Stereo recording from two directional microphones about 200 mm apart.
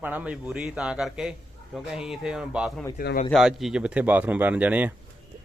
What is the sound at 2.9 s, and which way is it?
Speech, 45° left (ahead or behind).